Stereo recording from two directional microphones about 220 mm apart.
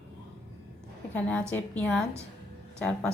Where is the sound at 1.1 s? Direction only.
5° left (ahead or behind).